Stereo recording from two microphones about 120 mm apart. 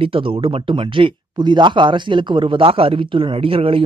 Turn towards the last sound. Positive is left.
turn(degrees=-50)  # may be behind; listen again after turning